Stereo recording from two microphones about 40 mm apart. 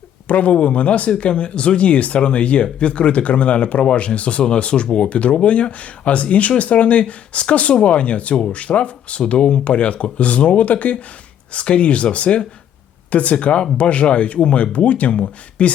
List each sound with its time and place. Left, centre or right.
0.3 s speech: left
13.4 s speech: left